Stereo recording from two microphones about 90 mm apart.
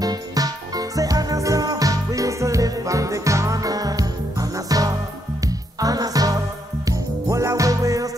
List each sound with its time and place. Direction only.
0.0 s music: 45° right (ahead or behind)